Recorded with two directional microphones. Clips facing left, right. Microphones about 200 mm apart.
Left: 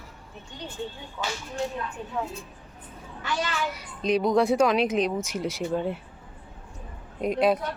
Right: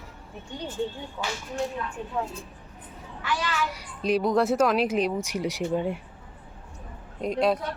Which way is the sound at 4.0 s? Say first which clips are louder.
Left 1 dB; 5° right (ahead or behind).